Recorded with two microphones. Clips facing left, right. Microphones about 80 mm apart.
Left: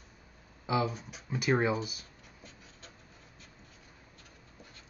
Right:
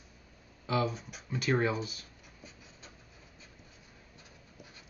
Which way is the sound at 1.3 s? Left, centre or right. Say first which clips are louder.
Left 1 dB; centre.